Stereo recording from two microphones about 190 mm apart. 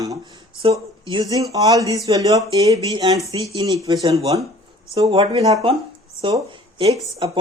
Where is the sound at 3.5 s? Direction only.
30° right (ahead or behind).